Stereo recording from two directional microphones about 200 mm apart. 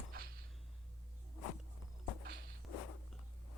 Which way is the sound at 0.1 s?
45° right (ahead or behind).